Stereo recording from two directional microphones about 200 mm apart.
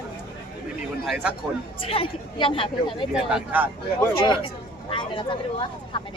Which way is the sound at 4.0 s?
25° left (ahead or behind).